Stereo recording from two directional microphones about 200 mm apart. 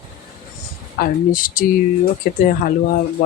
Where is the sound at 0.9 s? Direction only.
45° left (ahead or behind).